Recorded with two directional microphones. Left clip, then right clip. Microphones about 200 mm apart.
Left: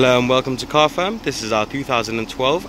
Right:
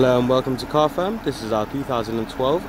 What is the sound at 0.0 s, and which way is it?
Speech, centre (ahead or behind).